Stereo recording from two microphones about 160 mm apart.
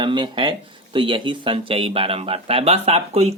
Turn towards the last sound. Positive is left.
turn(degrees=-40)  # may be behind; listen again after turning